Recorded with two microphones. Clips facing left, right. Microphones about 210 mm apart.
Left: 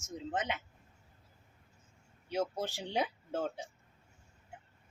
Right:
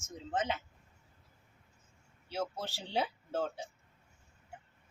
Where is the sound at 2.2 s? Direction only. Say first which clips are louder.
Left 3 dB; 15° left (ahead or behind).